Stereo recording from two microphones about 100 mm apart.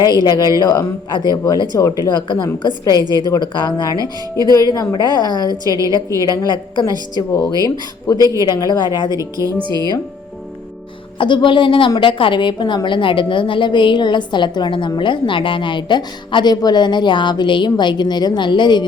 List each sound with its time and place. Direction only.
0.0 s a woman's voice: 45° left (ahead or behind)
3.0 s speech: 40° right (ahead or behind)
3.2 s a woman's voice: 45° left (ahead or behind)
9.1 s speech: 35° right (ahead or behind)
9.6 s speech: 50° right (ahead or behind)
11.2 s a woman's voice: 55° left (ahead or behind)